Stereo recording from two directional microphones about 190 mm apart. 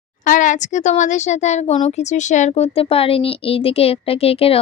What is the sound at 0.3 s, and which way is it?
A woman's voice, 40° left (ahead or behind).